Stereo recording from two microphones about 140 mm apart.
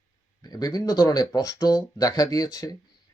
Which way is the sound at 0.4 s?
30° left (ahead or behind).